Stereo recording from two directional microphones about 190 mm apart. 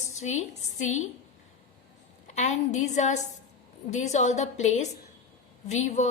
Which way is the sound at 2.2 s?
40° left (ahead or behind).